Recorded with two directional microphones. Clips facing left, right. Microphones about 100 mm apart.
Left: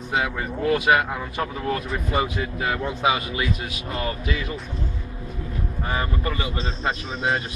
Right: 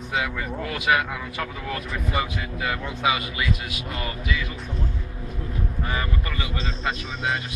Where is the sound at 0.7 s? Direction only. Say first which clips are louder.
Left 1 dB; 30° left (ahead or behind).